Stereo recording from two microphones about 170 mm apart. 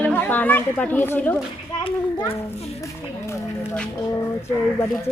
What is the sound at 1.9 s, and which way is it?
Speech, 30° left (ahead or behind).